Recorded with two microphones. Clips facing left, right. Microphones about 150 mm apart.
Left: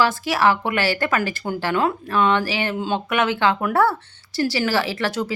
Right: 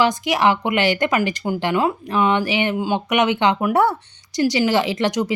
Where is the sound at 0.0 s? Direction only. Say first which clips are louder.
Right 1 dB; 20° right (ahead or behind).